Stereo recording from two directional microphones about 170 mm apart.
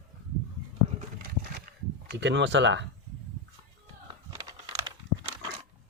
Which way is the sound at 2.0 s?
90° right.